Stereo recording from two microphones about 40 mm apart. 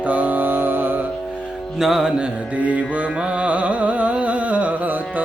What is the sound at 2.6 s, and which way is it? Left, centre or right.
Music, right.